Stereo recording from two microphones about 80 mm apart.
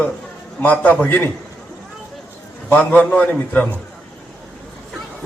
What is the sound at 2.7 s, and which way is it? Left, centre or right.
A man's voice, centre.